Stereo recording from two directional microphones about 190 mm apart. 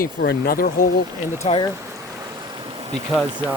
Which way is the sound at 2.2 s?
20° right (ahead or behind).